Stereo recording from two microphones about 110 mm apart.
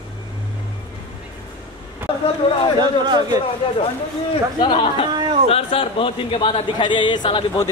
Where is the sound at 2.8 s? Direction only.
40° right (ahead or behind).